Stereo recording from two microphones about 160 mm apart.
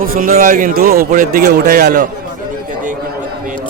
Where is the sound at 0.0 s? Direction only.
60° right (ahead or behind).